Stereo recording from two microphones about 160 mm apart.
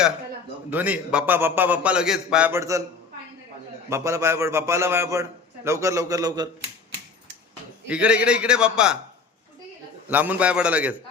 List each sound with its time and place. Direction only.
0.7 s a man's voice: 10° right (ahead or behind)
2.5 s a man's voice: 20° right (ahead or behind)
3.8 s a man's voice: 15° right (ahead or behind)
7.9 s a man's voice: 5° right (ahead or behind)
10.1 s a man's voice: 10° right (ahead or behind)